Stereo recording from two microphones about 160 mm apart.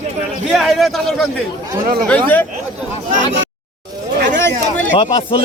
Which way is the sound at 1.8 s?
60° right (ahead or behind).